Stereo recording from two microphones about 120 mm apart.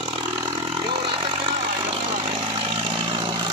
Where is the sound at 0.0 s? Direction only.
40° right (ahead or behind).